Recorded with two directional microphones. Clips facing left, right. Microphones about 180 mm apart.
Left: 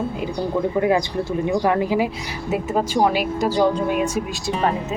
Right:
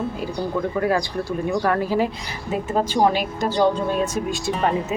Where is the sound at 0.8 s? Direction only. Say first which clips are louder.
Left 3 dB; 20° left (ahead or behind).